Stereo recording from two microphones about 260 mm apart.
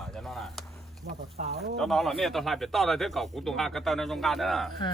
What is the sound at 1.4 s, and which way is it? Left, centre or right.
Speech, right.